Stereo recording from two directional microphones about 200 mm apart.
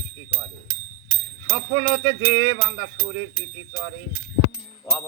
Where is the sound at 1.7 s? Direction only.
10° right (ahead or behind).